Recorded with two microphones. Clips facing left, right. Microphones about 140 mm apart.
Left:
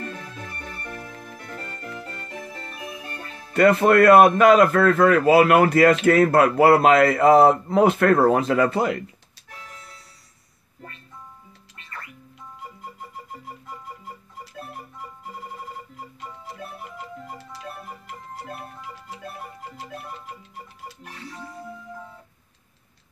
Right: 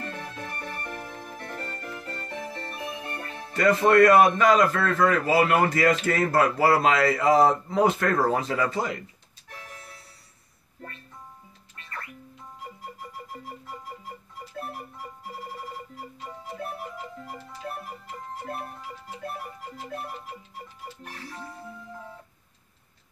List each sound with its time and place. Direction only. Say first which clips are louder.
3.5 s a man's voice: left 3 dB; 60° left (ahead or behind)